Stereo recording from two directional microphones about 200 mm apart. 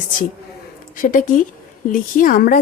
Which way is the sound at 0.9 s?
40° left (ahead or behind).